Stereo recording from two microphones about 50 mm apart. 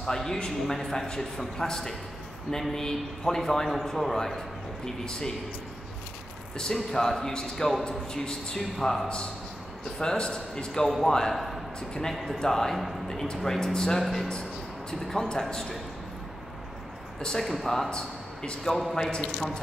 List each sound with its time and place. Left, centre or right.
0.0 s a man's voice: centre
6.6 s a man's voice: centre
8.7 s a man's voice: centre
11.9 s a man's voice: centre
17.2 s a man's voice: centre
17.8 s a man's voice: centre